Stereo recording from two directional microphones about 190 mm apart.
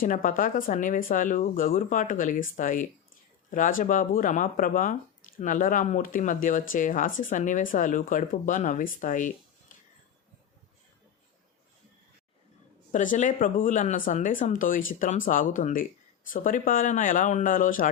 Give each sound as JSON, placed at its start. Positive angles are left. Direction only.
{"t": 0.0, "sound": "speech", "side_deg": 45}
{"t": 12.9, "sound": "speech", "side_deg": 40}